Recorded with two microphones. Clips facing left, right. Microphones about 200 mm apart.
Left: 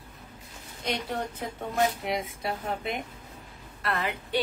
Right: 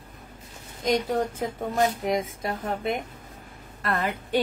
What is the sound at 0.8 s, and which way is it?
Speech, 45° right (ahead or behind).